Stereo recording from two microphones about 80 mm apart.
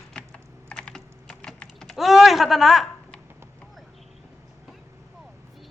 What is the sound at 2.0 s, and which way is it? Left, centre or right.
Speech, centre.